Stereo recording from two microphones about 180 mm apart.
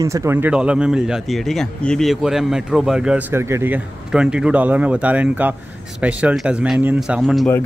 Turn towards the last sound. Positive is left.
turn(degrees=0)  # may be behind; listen again after turning